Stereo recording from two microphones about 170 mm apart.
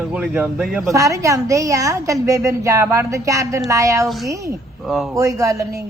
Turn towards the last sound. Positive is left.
turn(degrees=-20)  # may be behind; listen again after turning